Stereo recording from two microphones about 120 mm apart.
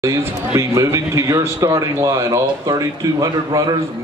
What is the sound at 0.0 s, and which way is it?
A man's voice, 20° right (ahead or behind).